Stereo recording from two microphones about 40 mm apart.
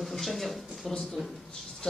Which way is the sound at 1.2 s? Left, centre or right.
Right.